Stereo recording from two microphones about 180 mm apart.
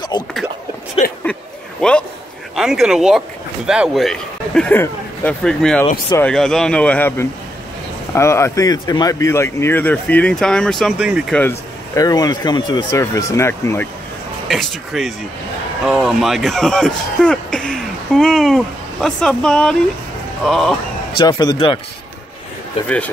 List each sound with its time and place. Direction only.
0.1 s speech: 25° left (ahead or behind)
1.8 s a man's voice: 5° left (ahead or behind)
11.3 s speech: 15° left (ahead or behind)
14.5 s speech: centre (ahead or behind)
21.2 s speech: 20° left (ahead or behind)
22.8 s speech: 5° left (ahead or behind)